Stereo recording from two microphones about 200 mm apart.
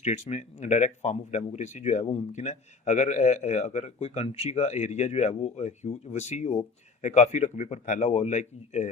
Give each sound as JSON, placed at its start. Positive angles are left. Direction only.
{"t": 0.0, "sound": "speech", "side_deg": 35}